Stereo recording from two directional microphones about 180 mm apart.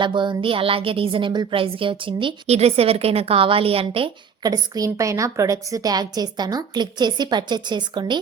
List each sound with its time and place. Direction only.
0.0 s a woman's voice: 25° right (ahead or behind)